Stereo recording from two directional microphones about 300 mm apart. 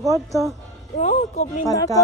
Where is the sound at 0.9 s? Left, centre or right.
Left.